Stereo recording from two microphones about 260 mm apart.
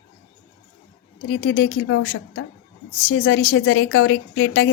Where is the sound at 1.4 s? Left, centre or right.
Left.